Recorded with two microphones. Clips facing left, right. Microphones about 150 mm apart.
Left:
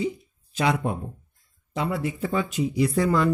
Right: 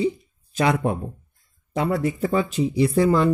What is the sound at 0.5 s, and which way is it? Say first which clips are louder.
Speech: right 3 dB; 50° right (ahead or behind).